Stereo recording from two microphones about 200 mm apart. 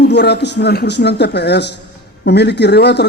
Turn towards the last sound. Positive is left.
turn(degrees=55)  # may be behind; listen again after turning